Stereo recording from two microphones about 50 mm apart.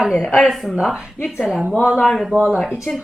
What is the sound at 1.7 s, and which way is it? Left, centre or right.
Speech, right.